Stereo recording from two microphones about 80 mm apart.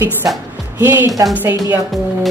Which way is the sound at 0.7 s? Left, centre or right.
Right.